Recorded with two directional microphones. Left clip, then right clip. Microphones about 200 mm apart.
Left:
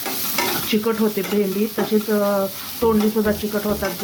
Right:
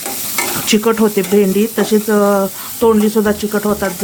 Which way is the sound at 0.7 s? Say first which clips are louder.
Right 10 dB; 45° right (ahead or behind).